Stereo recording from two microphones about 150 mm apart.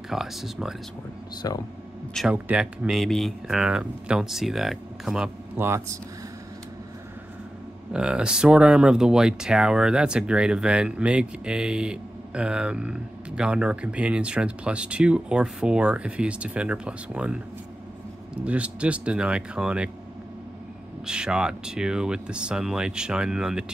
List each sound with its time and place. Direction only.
0.1 s speech: centre (ahead or behind)
1.4 s speech: 25° left (ahead or behind)
2.1 s speech: 5° right (ahead or behind)
7.9 s speech: 5° right (ahead or behind)
21.0 s speech: 5° right (ahead or behind)